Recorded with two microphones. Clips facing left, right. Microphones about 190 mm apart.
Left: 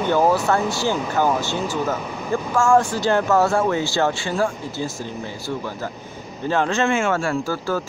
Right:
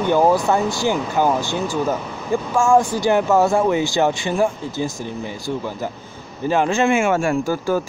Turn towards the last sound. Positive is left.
turn(degrees=-15)  # may be behind; listen again after turning